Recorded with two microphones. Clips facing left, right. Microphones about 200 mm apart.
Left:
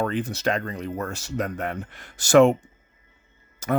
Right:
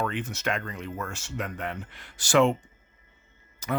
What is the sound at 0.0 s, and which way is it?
Speech, 35° left (ahead or behind).